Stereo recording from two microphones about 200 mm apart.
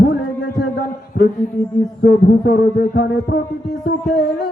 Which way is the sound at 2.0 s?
55° left (ahead or behind).